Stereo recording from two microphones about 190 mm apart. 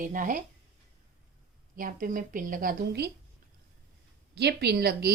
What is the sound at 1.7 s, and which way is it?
A woman's voice, 45° right (ahead or behind).